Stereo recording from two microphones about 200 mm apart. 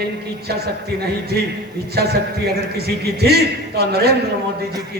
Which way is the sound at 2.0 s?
50° right (ahead or behind).